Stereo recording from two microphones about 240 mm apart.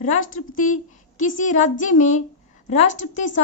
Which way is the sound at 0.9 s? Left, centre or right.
Left.